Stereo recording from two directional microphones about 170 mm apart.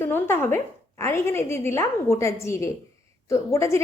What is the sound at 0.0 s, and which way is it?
A woman's voice, 15° left (ahead or behind).